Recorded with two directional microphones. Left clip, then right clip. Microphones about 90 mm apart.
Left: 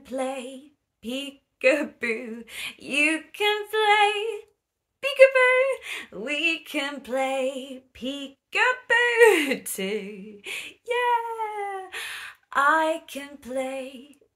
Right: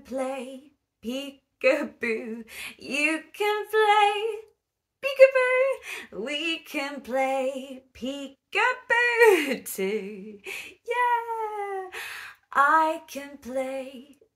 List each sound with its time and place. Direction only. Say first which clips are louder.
0.0 s female singing: left 1 dB; 20° left (ahead or behind)
10.4 s speech: left 3 dB; 20° left (ahead or behind)
11.0 s a sound: even; 35° left (ahead or behind)
11.9 s speech: left 2 dB; 15° left (ahead or behind)
13.4 s female singing: even; 20° left (ahead or behind)